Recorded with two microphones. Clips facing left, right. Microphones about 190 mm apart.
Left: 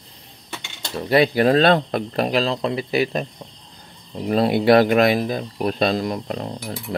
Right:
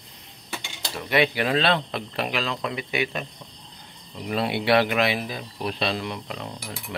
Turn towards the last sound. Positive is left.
turn(degrees=35)  # may be behind; listen again after turning